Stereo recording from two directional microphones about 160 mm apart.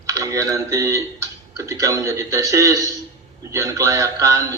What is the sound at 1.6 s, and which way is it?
Speech, 20° right (ahead or behind).